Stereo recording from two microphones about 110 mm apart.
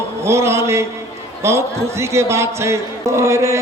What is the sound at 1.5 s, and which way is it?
A man's voice, 25° right (ahead or behind).